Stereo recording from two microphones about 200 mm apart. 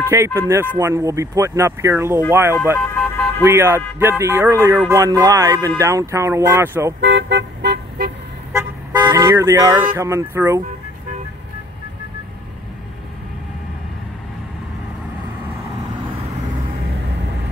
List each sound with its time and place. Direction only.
0.1 s speech: 15° right (ahead or behind)
2.8 s vehicle: centre (ahead or behind)
3.4 s speech: 15° right (ahead or behind)
7.0 s car: 65° right (ahead or behind)
8.5 s car: 15° right (ahead or behind)
9.9 s speech: 15° right (ahead or behind)